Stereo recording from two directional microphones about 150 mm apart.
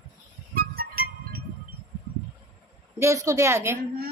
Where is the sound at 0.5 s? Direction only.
80° right.